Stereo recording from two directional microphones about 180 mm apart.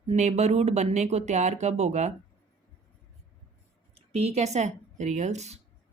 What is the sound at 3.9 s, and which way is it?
Speech, 35° right (ahead or behind).